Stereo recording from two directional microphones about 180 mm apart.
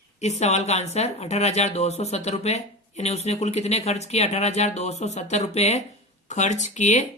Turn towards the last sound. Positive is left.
turn(degrees=40)  # may be behind; listen again after turning